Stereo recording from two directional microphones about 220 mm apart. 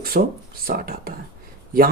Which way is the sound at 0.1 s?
40° right (ahead or behind).